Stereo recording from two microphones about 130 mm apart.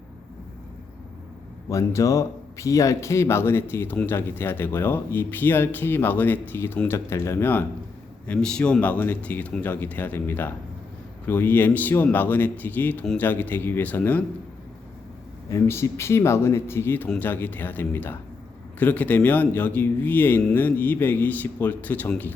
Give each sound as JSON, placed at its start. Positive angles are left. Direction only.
{"t": 1.7, "sound": "speech", "side_deg": 25}
{"t": 8.3, "sound": "speech", "side_deg": 5}
{"t": 15.4, "sound": "speech", "side_deg": 20}